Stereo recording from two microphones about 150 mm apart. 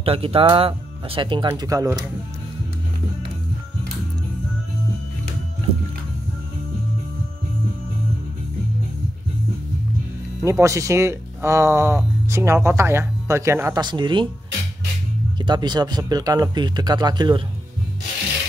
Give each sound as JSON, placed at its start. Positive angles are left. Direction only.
{"t": 0.0, "sound": "speech", "side_deg": -40}
{"t": 10.4, "sound": "speech", "side_deg": -20}
{"t": 13.7, "sound": "speech", "side_deg": -30}
{"t": 15.3, "sound": "speech", "side_deg": -30}